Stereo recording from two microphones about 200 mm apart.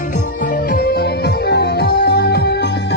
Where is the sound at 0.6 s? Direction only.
50° left (ahead or behind).